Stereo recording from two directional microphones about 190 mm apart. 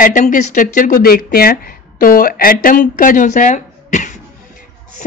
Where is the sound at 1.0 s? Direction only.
55° left (ahead or behind).